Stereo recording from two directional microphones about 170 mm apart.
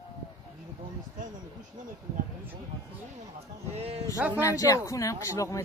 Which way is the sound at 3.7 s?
35° right (ahead or behind).